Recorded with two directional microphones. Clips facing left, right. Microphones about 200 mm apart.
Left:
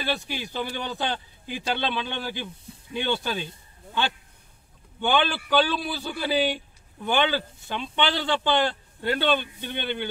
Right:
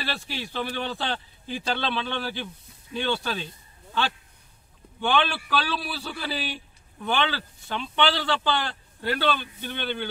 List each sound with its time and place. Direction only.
0.4 s a man's voice: 15° left (ahead or behind)
5.0 s a man's voice: 20° left (ahead or behind)